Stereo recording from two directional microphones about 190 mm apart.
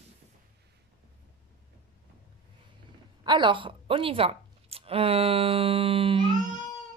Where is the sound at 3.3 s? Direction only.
25° right (ahead or behind).